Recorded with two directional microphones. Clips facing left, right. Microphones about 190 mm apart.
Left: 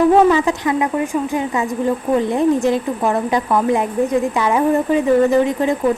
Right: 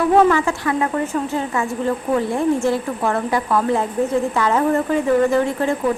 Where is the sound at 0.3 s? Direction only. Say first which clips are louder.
Left 3 dB; 20° left (ahead or behind).